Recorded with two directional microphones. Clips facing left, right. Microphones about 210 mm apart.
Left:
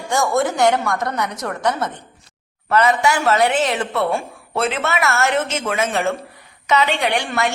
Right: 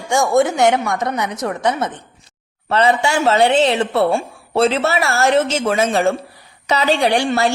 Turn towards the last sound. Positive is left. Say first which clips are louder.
# right 5 dB
turn(degrees=-30)  # may be behind; listen again after turning